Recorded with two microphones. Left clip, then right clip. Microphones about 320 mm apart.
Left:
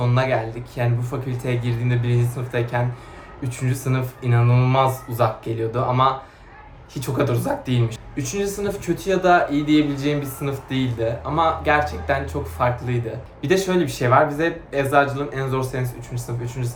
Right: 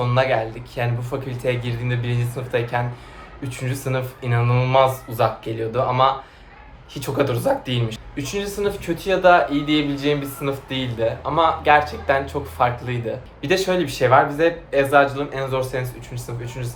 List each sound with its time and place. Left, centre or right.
0.0 s speech: centre